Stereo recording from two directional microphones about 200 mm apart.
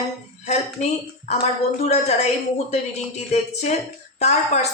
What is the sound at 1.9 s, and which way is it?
Speech, 35° left (ahead or behind).